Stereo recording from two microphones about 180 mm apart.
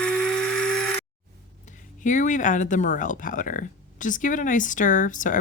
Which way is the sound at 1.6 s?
45° left (ahead or behind).